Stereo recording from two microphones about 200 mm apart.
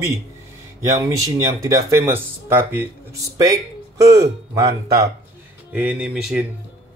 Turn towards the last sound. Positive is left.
turn(degrees=-5)  # may be behind; listen again after turning